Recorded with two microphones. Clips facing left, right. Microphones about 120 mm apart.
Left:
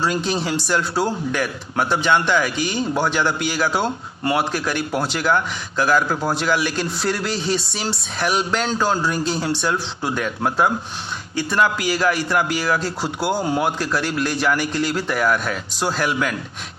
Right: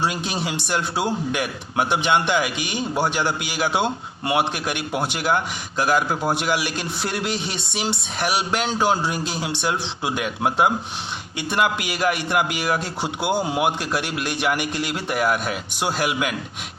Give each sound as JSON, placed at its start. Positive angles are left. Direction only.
{"t": 0.0, "sound": "a man's voice", "side_deg": -15}